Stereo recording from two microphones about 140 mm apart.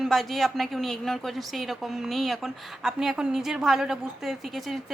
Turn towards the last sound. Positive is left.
turn(degrees=0)  # may be behind; listen again after turning